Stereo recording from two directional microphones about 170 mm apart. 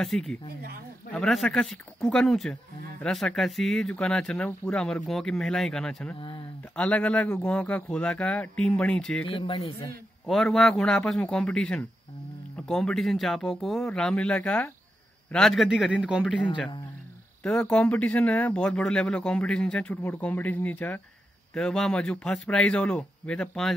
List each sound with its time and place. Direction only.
0.0 s speech: centre (ahead or behind)
9.3 s a man's voice: 25° left (ahead or behind)
10.2 s speech: centre (ahead or behind)
17.4 s speech: 5° left (ahead or behind)